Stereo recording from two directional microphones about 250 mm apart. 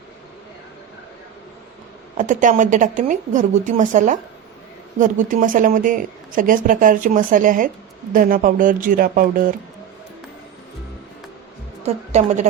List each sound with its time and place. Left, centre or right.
2.1 s speech: right
11.8 s a woman's voice: right